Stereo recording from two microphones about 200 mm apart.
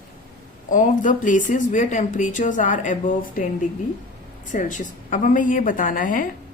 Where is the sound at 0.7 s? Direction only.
40° left (ahead or behind).